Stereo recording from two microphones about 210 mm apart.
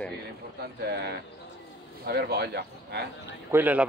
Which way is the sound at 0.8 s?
50° right (ahead or behind).